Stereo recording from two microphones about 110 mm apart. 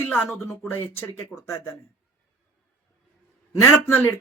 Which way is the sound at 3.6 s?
20° left (ahead or behind).